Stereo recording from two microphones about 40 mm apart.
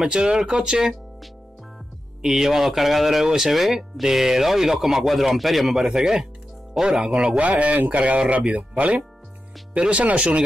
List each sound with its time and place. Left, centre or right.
0.1 s speech: right
2.2 s speech: centre
5.9 s speech: centre